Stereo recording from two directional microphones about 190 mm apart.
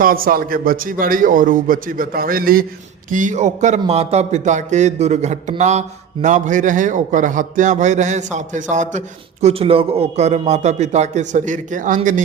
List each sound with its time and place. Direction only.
0.0 s a man's voice: 50° right (ahead or behind)